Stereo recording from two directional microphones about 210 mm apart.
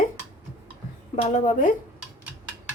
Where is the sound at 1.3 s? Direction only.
35° left (ahead or behind).